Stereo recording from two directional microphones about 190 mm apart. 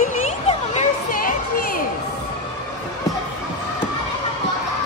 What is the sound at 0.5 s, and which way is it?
Children playing, 35° left (ahead or behind).